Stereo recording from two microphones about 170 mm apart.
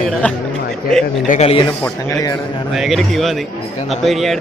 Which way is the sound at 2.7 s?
Centre (ahead or behind).